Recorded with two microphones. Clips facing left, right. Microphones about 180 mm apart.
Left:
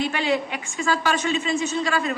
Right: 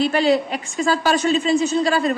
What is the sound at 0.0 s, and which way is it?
A woman's voice, 35° right (ahead or behind).